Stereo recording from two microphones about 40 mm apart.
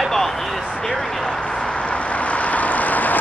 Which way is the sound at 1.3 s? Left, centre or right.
Centre.